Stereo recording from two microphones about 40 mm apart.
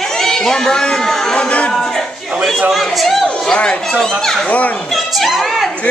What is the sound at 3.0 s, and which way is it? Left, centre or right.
Chatter, centre.